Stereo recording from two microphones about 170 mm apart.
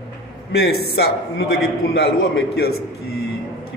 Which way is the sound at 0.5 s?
70° left (ahead or behind).